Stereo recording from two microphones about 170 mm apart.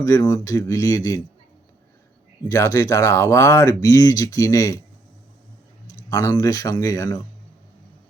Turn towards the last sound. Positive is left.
turn(degrees=20)  # may be behind; listen again after turning